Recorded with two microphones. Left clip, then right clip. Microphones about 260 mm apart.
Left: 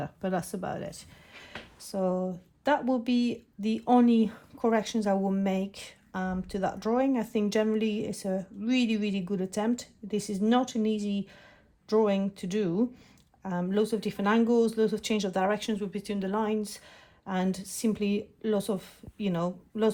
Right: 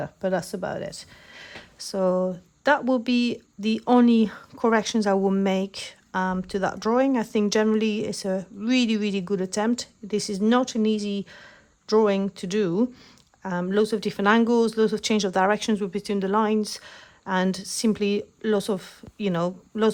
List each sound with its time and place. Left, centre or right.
0.0 s speech: right